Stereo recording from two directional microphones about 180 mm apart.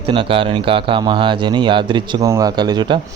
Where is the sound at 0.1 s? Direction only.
30° right (ahead or behind).